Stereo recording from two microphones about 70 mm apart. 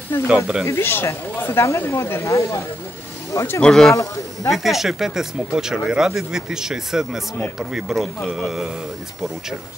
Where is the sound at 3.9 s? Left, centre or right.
Left.